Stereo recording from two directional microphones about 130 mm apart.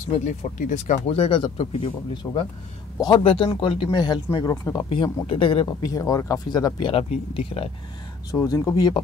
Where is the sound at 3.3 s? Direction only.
40° left (ahead or behind).